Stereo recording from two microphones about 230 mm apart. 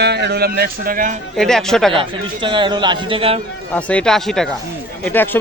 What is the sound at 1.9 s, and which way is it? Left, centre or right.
A man's voice, right.